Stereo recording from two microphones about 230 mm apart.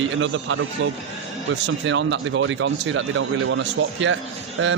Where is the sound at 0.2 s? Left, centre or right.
Right.